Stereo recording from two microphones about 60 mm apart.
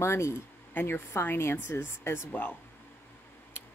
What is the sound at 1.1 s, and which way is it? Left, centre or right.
Speech, left.